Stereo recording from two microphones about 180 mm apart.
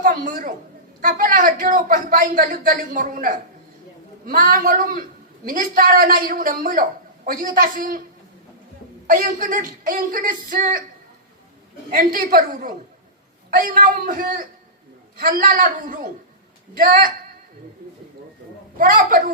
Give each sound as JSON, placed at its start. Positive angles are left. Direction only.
{"t": 0.0, "sound": "a woman's voice", "side_deg": -50}
{"t": 9.0, "sound": "speech", "side_deg": -50}
{"t": 11.9, "sound": "speech", "side_deg": -55}
{"t": 18.8, "sound": "speech", "side_deg": -50}